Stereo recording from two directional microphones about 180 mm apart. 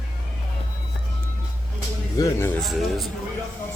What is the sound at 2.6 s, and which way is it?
Speech, centre (ahead or behind).